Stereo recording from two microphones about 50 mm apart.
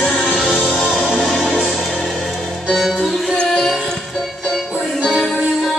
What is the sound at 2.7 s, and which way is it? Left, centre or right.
Music, centre.